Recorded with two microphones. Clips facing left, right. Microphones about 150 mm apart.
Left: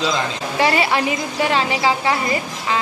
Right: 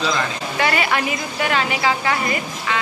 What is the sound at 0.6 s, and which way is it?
A woman's voice, 30° left (ahead or behind).